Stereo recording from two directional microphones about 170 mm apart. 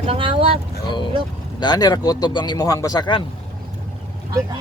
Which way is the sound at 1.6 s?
25° left (ahead or behind).